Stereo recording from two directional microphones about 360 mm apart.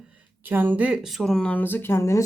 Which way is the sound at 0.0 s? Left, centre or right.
Centre.